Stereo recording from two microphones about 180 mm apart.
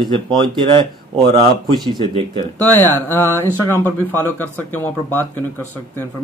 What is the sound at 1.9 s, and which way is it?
Speech, 25° right (ahead or behind).